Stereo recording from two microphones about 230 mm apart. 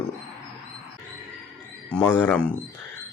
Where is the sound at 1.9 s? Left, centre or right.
Centre.